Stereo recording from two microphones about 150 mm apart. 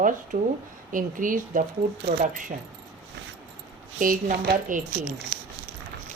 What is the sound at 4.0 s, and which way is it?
Speech, 65° right (ahead or behind).